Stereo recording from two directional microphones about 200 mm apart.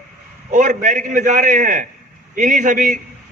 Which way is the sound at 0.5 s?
40° right (ahead or behind).